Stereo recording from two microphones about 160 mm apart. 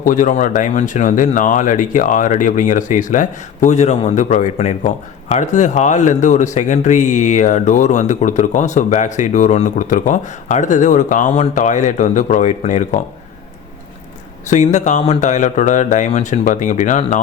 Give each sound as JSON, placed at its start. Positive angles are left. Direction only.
{"t": 0.0, "sound": "speech", "side_deg": 55}
{"t": 14.4, "sound": "speech", "side_deg": 50}